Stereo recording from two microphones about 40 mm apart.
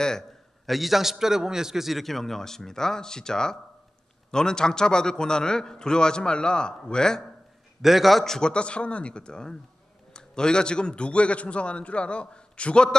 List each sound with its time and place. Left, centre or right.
0.7 s a man's voice: centre
7.8 s a man's voice: centre
8.4 s a man's voice: left